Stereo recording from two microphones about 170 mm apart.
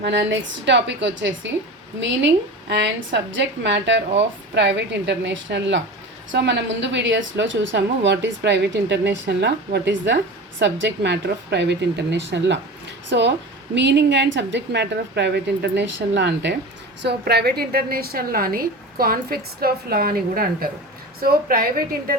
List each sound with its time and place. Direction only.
0.0 s a woman's voice: 90° right
17.0 s a woman's voice: 75° right (ahead or behind); by 22.1 s 60° right (ahead or behind)